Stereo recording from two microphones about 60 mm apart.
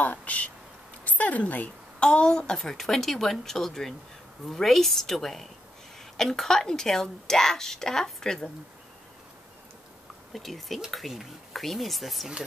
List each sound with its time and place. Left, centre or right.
0.0 s speech: left
1.0 s a sound: left
2.0 s a woman's voice: centre
10.3 s speech: centre